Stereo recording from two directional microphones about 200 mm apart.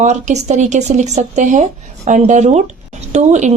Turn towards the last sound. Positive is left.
turn(degrees=-35)  # may be behind; listen again after turning